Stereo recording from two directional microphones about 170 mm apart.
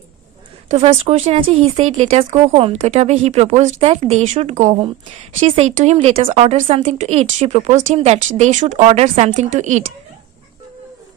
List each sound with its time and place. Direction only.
0.7 s a woman's voice: 40° right (ahead or behind)